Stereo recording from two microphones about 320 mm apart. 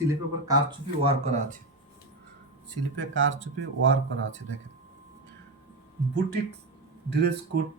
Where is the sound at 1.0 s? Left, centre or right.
Right.